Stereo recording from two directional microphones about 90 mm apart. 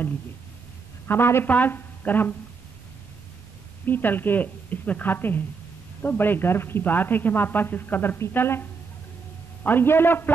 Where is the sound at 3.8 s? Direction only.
20° left (ahead or behind).